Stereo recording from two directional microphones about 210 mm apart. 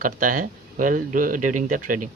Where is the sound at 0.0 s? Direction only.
40° right (ahead or behind).